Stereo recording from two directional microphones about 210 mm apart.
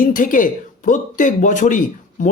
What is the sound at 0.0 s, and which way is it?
Speech, 40° left (ahead or behind).